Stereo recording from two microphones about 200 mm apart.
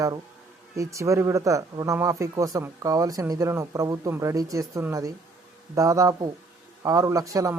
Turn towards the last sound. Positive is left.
turn(degrees=-15)  # may be behind; listen again after turning